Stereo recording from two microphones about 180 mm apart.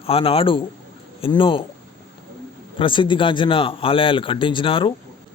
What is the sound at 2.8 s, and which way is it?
Speech, 25° left (ahead or behind).